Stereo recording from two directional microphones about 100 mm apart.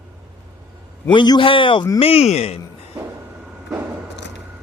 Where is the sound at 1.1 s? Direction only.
50° left (ahead or behind).